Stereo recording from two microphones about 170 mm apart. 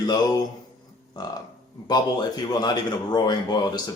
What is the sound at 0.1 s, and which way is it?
Speech, 25° left (ahead or behind).